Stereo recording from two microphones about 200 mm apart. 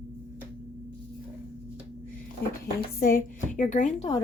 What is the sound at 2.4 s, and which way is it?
A woman's voice, 50° left (ahead or behind).